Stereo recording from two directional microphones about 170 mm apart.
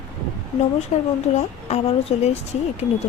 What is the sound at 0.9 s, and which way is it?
Speech, 40° left (ahead or behind).